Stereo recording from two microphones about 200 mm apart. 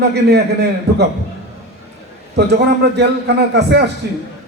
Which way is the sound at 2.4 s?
55° right (ahead or behind).